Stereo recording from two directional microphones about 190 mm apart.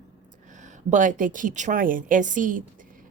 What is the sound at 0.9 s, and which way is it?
Speech, 40° right (ahead or behind).